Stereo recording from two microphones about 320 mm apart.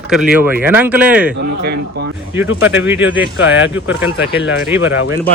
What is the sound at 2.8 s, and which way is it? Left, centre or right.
Speech, centre.